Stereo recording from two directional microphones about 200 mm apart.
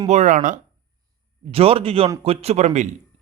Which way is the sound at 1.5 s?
30° right (ahead or behind).